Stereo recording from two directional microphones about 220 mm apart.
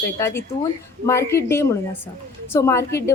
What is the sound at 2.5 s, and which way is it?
Speech, 10° left (ahead or behind).